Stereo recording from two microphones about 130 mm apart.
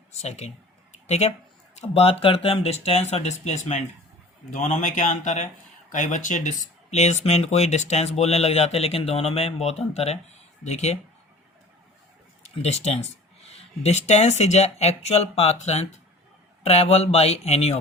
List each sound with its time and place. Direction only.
0.2 s speech: 55° left (ahead or behind)
12.4 s speech: 55° left (ahead or behind)